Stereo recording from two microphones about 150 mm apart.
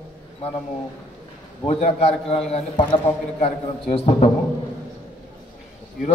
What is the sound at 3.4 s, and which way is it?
Speech, 40° left (ahead or behind).